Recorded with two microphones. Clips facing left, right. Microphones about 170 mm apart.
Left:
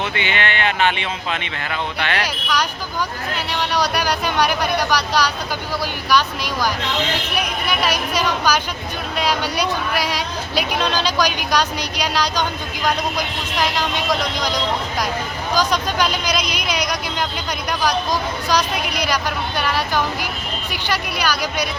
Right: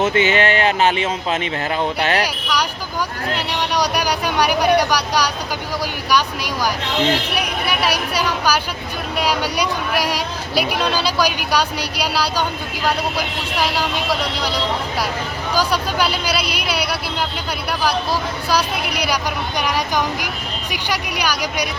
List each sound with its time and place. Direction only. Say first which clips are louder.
0.0 s speech: right 7 dB; 40° right (ahead or behind)
2.2 s speech: right 1 dB; 10° right (ahead or behind)